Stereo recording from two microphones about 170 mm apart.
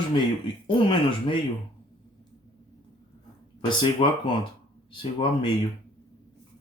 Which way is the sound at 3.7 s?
30° left (ahead or behind).